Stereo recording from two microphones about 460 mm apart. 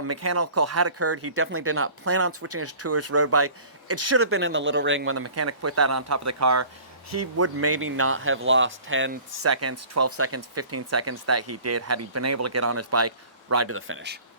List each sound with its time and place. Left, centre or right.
0.0 s speech: right